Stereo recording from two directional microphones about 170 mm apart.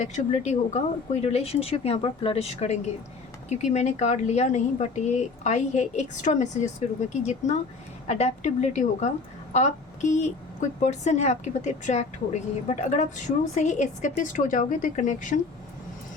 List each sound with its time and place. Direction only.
0.0 s a woman's voice: 45° left (ahead or behind)